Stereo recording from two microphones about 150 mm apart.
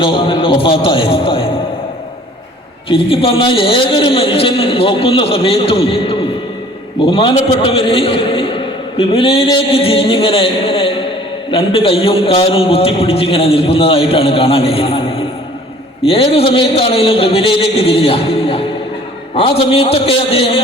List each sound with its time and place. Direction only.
0.0 s a man's voice: 35° left (ahead or behind)
2.9 s a man's voice: 35° left (ahead or behind)